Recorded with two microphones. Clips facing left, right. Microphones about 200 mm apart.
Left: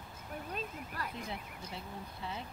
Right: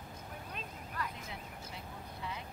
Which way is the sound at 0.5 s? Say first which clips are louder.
Left 1 dB; 35° left (ahead or behind).